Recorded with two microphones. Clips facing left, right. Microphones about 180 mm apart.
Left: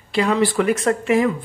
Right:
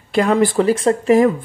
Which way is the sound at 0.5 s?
30° right (ahead or behind).